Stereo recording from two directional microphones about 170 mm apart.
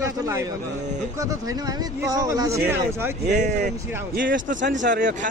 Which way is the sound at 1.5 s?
20° right (ahead or behind).